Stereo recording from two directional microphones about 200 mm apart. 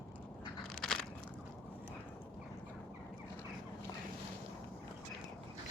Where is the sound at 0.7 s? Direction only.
Centre (ahead or behind).